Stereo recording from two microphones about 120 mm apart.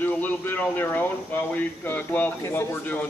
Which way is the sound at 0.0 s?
15° left (ahead or behind).